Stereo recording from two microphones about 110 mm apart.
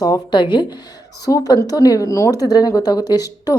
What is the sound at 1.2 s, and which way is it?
Speech, 35° left (ahead or behind).